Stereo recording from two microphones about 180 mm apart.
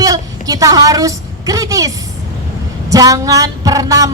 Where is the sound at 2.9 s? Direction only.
20° right (ahead or behind).